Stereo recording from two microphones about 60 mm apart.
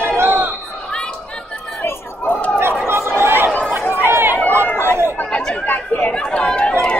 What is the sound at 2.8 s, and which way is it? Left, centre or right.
Chatter, right.